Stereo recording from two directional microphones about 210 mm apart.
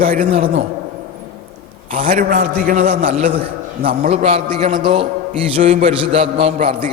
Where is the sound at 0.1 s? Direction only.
35° right (ahead or behind).